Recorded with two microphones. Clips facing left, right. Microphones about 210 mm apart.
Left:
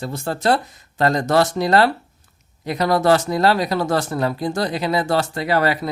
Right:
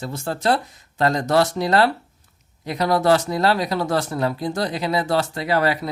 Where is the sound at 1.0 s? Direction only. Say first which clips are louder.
Left 1 dB; 60° left (ahead or behind).